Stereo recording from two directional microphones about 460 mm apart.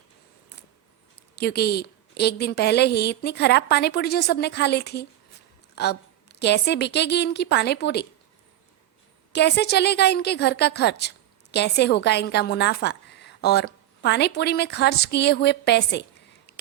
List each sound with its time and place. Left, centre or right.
1.4 s a woman's voice: left
9.3 s a woman's voice: left